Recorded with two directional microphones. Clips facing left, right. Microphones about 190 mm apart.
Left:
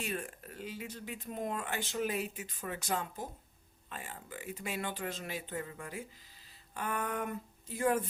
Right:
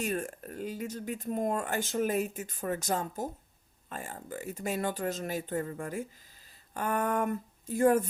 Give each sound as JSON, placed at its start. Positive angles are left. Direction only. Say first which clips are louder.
{"t": 0.0, "sound": "speech", "louder": "right 6 dB", "side_deg": -45}